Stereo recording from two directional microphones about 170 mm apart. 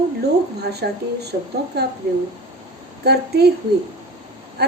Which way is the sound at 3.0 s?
70° right (ahead or behind).